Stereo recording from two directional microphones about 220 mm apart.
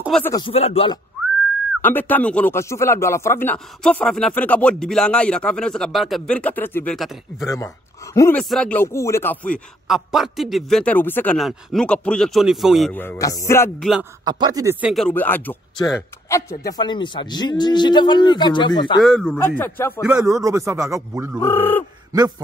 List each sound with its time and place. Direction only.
0.2 s a man's voice: 15° left (ahead or behind)
0.5 s a man's voice: 25° left (ahead or behind)
1.8 s speech: 10° left (ahead or behind)
7.4 s a man's voice: 15° left (ahead or behind)
9.8 s speech: centre (ahead or behind)
13.7 s speech: centre (ahead or behind)
14.2 s a man's voice: 15° right (ahead or behind); by 18.9 s 20° left (ahead or behind)
18.9 s speech: centre (ahead or behind)
20.2 s speech: 15° right (ahead or behind)
21.4 s a man's voice: 10° left (ahead or behind)